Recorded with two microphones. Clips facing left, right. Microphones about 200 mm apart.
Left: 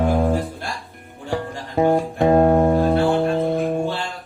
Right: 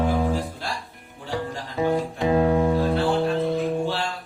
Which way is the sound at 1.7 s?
55° left (ahead or behind).